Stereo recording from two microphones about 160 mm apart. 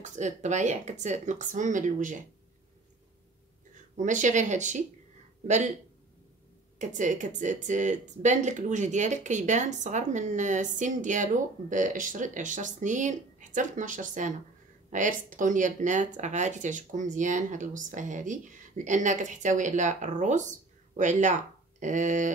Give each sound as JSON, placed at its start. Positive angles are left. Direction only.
{"t": 0.0, "sound": "speech", "side_deg": -50}
{"t": 3.9, "sound": "speech", "side_deg": -50}
{"t": 6.8, "sound": "speech", "side_deg": -50}